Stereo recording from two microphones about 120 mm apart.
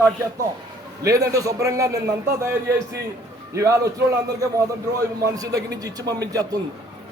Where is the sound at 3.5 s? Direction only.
25° right (ahead or behind).